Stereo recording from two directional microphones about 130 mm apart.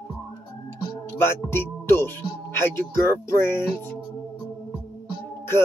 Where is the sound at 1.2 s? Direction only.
20° left (ahead or behind).